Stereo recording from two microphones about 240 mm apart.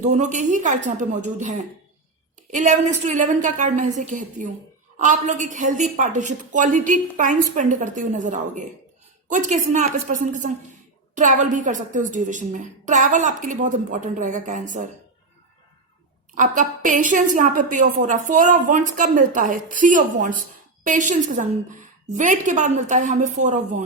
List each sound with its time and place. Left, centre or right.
0.0 s a woman's voice: right
2.5 s a woman's voice: right
16.3 s a woman's voice: right